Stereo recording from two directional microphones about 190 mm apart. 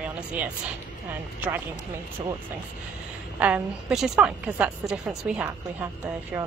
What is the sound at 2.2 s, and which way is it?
Speech, 25° right (ahead or behind).